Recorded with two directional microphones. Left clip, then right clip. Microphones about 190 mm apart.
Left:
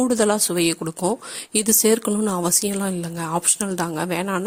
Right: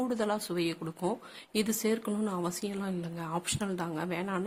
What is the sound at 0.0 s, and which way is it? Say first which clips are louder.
Speech: left 12 dB; 45° left (ahead or behind).